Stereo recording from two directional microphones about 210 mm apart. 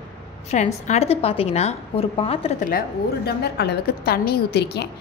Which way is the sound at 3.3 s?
50° left (ahead or behind).